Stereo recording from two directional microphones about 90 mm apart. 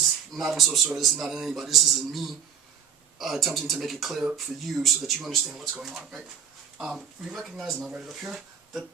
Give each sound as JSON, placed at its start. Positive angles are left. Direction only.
{"t": 0.5, "sound": "speech", "side_deg": 0}
{"t": 7.3, "sound": "speech", "side_deg": 0}